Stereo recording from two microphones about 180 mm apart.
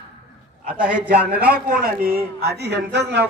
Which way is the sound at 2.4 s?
65° right (ahead or behind).